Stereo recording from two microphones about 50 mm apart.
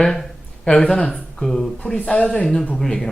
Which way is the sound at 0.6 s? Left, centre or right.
Left.